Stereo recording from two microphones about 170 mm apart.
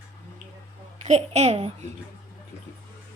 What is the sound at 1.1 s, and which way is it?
Speech, 40° right (ahead or behind).